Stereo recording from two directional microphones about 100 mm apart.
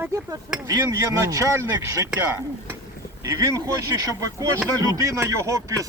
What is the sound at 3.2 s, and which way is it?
Speech, 35° right (ahead or behind).